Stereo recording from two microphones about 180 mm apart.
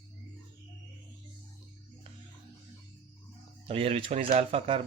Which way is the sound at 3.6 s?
30° right (ahead or behind).